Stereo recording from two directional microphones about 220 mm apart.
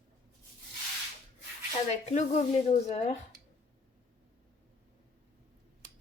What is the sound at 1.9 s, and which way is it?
Speech, 30° left (ahead or behind).